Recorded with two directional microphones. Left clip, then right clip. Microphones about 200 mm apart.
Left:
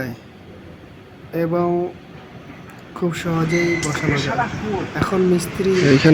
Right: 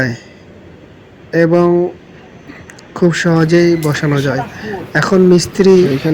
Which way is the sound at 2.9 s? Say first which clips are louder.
Right 10 dB; 25° right (ahead or behind).